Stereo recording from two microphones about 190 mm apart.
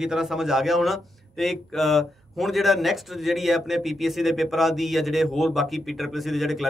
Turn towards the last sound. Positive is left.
turn(degrees=0)  # may be behind; listen again after turning